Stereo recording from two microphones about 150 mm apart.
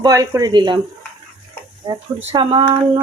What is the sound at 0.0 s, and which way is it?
Speech, 25° right (ahead or behind).